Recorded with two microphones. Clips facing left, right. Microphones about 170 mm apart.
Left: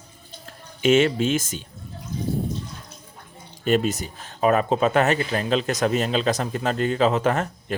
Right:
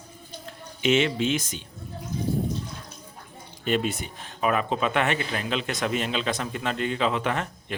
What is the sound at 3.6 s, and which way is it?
Speech, 40° left (ahead or behind).